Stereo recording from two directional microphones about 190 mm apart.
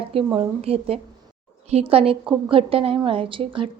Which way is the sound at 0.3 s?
30° right (ahead or behind).